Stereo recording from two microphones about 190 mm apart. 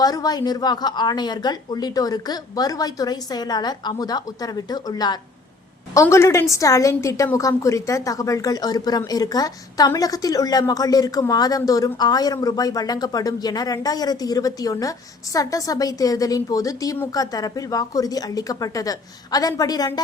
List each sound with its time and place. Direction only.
0.0 s a woman's voice: 20° left (ahead or behind)